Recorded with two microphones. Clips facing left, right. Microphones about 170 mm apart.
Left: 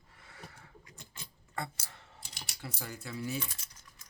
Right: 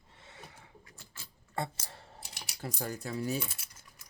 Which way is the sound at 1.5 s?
30° right (ahead or behind).